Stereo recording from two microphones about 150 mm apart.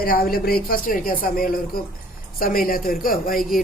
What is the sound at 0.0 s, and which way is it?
A woman's voice, 80° left.